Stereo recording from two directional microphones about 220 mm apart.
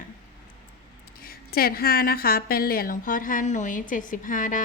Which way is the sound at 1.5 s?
45° left (ahead or behind).